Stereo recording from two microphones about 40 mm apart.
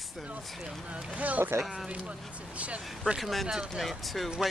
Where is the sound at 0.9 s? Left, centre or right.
Right.